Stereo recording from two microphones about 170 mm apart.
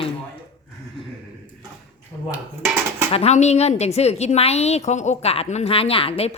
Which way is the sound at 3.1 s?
40° left (ahead or behind).